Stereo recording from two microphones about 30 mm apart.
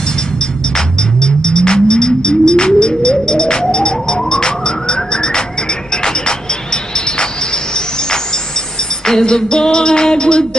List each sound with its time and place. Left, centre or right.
0.7 s a sound: left
3.7 s emergency vehicle: left
6.0 s music: left
9.2 s music: left